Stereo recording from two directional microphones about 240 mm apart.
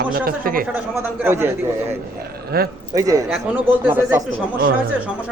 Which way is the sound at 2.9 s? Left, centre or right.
Centre.